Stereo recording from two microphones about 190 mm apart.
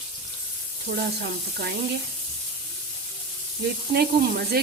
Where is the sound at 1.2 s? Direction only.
60° right (ahead or behind).